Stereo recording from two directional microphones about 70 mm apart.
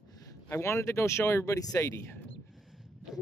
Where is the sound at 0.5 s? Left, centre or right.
Left.